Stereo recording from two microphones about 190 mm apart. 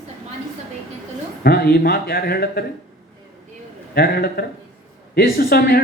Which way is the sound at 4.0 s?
55° left (ahead or behind).